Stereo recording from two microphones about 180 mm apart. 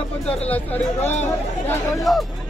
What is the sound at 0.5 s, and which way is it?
Speech, 10° left (ahead or behind).